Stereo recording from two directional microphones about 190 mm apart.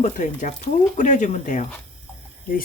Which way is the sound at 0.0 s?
40° left (ahead or behind).